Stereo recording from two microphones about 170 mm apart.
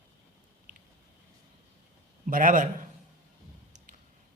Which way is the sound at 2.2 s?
50° right (ahead or behind).